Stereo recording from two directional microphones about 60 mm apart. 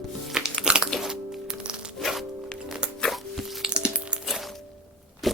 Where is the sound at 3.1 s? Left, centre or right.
Centre.